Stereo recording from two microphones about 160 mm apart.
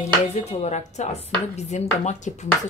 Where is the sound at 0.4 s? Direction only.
45° left (ahead or behind).